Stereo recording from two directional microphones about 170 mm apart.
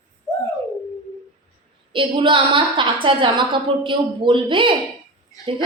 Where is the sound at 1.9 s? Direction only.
30° right (ahead or behind).